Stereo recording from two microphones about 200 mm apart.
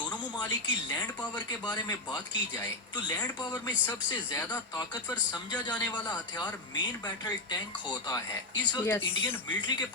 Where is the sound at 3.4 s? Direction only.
20° left (ahead or behind).